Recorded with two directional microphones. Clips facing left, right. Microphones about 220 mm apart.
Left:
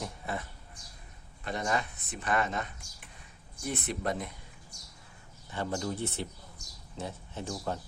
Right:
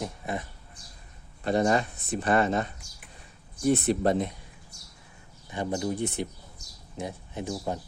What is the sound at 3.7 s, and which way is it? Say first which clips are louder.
Speech: right 10 dB; 30° right (ahead or behind).